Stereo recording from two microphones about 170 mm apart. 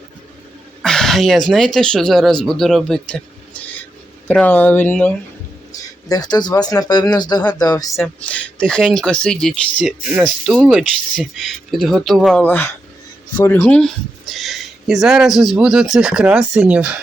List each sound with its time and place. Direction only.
0.8 s speech: 5° left (ahead or behind)
4.3 s speech: 10° left (ahead or behind)
6.1 s speech: 25° left (ahead or behind)
8.0 s speech: 10° left (ahead or behind)
12.4 s speech: 10° left (ahead or behind); by 16.9 s 5° right (ahead or behind)